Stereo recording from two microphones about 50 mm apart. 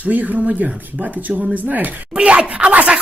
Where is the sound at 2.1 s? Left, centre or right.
Right.